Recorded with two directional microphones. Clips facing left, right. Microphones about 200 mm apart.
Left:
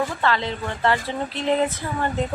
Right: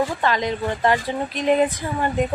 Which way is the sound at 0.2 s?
15° right (ahead or behind).